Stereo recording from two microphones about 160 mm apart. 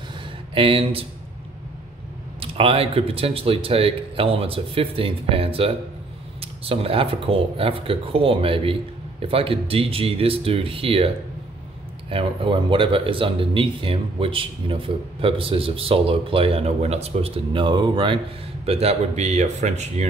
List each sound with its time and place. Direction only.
0.6 s speech: 35° right (ahead or behind)
2.4 s speech: 35° right (ahead or behind)